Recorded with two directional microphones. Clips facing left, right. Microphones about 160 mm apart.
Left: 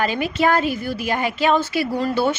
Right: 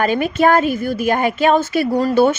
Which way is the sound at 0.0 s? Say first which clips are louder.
Right 5 dB; 50° right (ahead or behind).